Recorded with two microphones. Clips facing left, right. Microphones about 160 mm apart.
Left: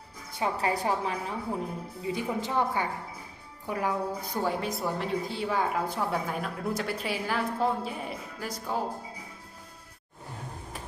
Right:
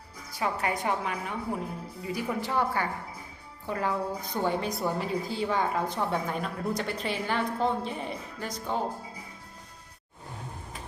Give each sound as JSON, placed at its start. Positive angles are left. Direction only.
{"t": 0.3, "sound": "a woman's voice", "side_deg": 30}
{"t": 2.1, "sound": "a woman's voice", "side_deg": 20}